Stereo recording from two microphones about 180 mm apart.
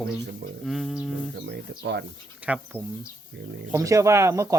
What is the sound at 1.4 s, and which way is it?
Speech, 70° right (ahead or behind).